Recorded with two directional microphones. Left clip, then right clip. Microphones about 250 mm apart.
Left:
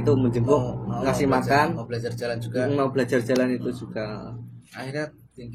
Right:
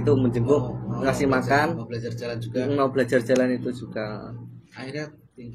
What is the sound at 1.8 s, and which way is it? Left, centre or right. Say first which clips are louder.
Speech: left 2 dB; centre.